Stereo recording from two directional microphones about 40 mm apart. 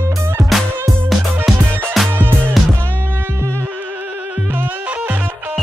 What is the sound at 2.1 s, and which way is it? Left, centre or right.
Music, right.